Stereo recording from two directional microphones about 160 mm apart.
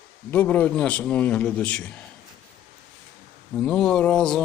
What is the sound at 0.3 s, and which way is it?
A man's voice, 10° left (ahead or behind).